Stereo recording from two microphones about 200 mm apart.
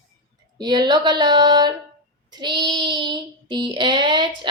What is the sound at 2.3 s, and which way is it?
Child singing, 20° right (ahead or behind).